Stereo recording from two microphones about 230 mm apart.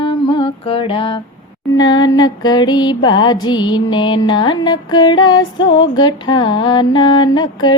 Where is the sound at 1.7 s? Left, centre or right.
Centre.